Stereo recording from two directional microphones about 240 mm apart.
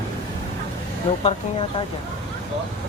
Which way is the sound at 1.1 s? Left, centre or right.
Left.